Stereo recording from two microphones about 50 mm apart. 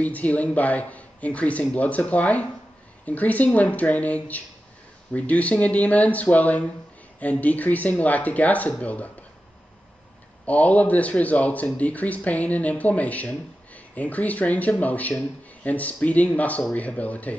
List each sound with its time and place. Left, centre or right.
0.0 s speech: left
10.4 s speech: left